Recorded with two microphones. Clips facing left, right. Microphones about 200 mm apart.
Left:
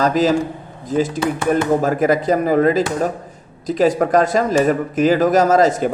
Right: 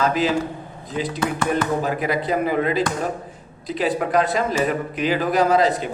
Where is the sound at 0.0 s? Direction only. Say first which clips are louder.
Left 5 dB; 40° left (ahead or behind).